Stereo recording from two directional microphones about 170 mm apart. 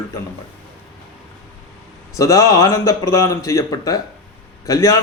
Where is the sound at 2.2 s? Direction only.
20° left (ahead or behind).